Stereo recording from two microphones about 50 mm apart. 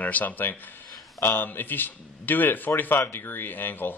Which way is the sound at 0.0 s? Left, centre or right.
Left.